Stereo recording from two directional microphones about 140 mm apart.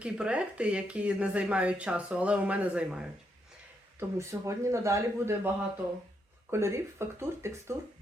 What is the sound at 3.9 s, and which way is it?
A man's voice, 20° right (ahead or behind).